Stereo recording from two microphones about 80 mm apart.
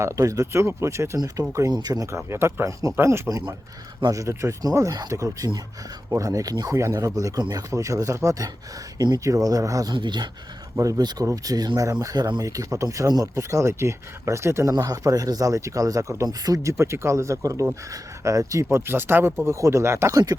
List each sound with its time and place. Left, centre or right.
0.0 s speech: right
1.2 s speech: right
2.0 s speech: right
6.7 s speech: right
9.0 s speech: right
9.2 s speech: right
9.9 s speech: right
10.8 s speech: right
11.0 s speech: right
14.8 s speech: right
16.7 s speech: right